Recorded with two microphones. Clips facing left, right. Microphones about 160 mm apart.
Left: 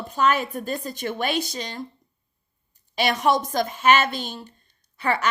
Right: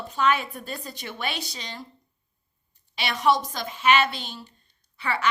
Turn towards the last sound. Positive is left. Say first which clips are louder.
# left 2 dB
turn(degrees=45)  # may be behind; listen again after turning